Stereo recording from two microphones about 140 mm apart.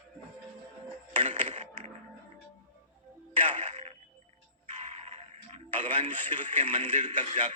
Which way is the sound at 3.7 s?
50° right (ahead or behind).